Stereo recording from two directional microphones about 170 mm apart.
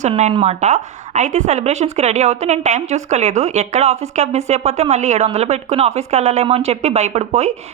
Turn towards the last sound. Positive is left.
turn(degrees=-40)  # may be behind; listen again after turning